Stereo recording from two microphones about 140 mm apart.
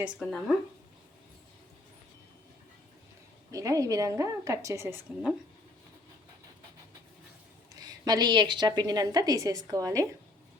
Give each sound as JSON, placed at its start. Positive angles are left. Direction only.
{"t": 0.0, "sound": "speech", "side_deg": 0}
{"t": 3.5, "sound": "a woman's voice", "side_deg": -25}
{"t": 7.8, "sound": "a woman's voice", "side_deg": -30}